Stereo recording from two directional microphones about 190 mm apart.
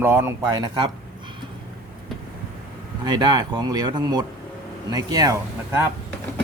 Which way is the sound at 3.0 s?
20° right (ahead or behind).